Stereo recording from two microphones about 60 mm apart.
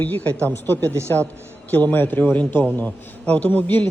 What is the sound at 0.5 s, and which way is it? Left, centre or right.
A man's voice, left.